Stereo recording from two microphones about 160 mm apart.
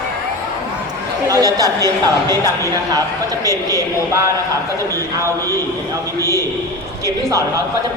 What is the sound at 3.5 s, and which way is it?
Speech, 20° right (ahead or behind).